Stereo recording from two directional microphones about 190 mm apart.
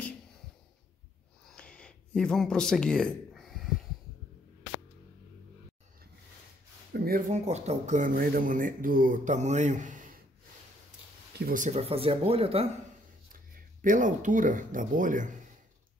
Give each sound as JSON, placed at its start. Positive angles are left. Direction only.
{"t": 1.5, "sound": "a sound", "side_deg": 5}
{"t": 6.9, "sound": "speech", "side_deg": -50}
{"t": 11.3, "sound": "speech", "side_deg": -50}
{"t": 13.3, "sound": "speech", "side_deg": -45}